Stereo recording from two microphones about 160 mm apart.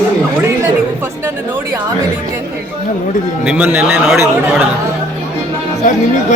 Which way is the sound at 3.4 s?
10° right (ahead or behind).